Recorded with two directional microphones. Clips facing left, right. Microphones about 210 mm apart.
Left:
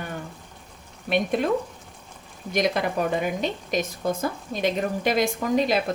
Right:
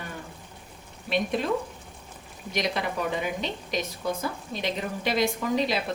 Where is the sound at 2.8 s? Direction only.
45° left (ahead or behind).